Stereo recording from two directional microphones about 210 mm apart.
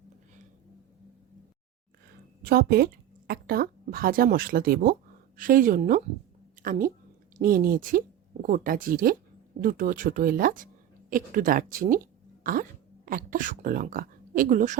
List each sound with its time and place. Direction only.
2.4 s a woman's voice: 45° right (ahead or behind)